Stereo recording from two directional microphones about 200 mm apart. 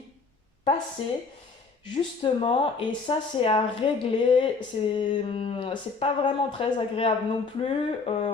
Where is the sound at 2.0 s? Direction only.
25° left (ahead or behind).